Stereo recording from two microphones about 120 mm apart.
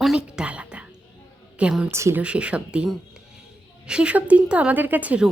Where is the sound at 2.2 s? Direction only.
10° right (ahead or behind).